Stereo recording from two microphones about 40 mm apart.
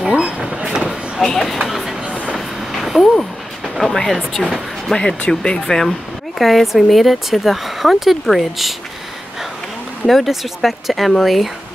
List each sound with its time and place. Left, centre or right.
0.2 s vehicle: right
1.2 s speech: centre
1.6 s a sound: centre
4.3 s speech: centre
4.9 s speech: left; by 8.7 s centre
10.0 s speech: centre